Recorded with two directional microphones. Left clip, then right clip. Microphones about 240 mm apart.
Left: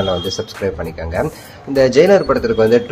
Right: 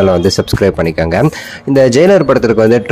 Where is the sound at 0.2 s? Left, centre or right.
Right.